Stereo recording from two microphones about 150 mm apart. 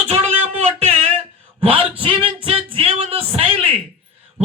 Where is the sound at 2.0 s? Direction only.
35° right (ahead or behind).